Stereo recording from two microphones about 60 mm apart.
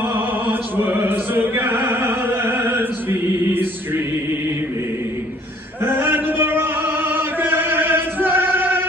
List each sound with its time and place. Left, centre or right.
0.1 s music: right
5.9 s chant: right